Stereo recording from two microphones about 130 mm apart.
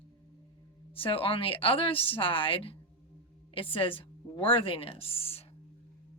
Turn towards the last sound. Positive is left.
turn(degrees=50)  # may be behind; listen again after turning